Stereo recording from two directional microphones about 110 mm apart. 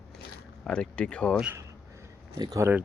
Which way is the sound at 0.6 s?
10° left (ahead or behind).